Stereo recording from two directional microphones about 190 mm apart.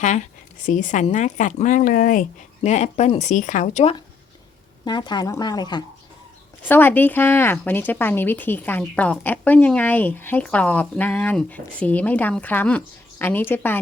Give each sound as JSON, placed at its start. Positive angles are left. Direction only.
{"t": 0.0, "sound": "a woman's voice", "side_deg": 40}
{"t": 4.9, "sound": "speech", "side_deg": 25}
{"t": 6.7, "sound": "speech", "side_deg": 10}